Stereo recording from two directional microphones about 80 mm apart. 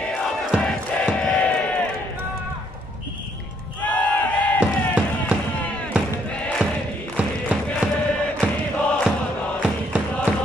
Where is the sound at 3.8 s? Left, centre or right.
Left.